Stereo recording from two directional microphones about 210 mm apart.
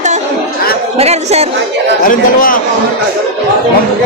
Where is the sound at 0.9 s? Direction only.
30° right (ahead or behind).